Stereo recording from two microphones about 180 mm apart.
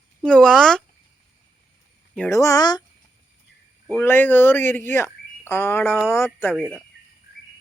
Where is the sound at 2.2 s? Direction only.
15° left (ahead or behind).